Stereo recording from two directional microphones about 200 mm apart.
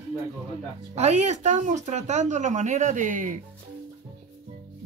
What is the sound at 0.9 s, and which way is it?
Speech, 35° right (ahead or behind).